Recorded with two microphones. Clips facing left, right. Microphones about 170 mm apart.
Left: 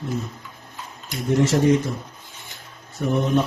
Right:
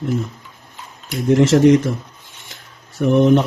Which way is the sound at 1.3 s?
90° right.